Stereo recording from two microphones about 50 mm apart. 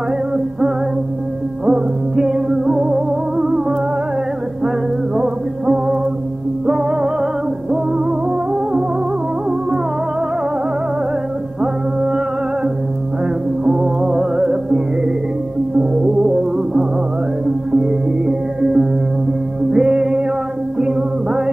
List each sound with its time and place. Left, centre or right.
1.7 s music: centre
5.1 s music: centre
11.6 s music: centre
13.7 s music: centre
15.8 s music: centre
17.8 s music: centre